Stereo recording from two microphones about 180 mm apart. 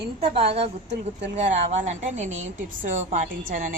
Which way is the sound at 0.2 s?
30° right (ahead or behind).